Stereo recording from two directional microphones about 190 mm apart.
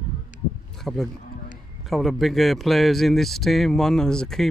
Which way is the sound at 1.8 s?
Centre (ahead or behind).